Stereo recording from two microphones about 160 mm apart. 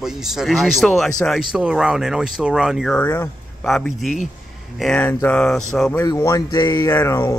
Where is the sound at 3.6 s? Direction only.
Centre (ahead or behind).